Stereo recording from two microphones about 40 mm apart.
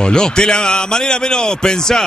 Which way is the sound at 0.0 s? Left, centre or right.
Left.